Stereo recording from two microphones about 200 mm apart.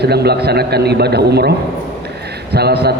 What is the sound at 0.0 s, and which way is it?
Speech, 55° right (ahead or behind).